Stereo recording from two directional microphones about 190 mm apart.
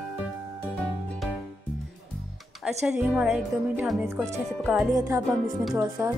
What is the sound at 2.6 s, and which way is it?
A woman's voice, 5° right (ahead or behind).